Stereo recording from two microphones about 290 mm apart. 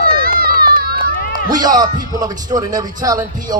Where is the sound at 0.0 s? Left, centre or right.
Right.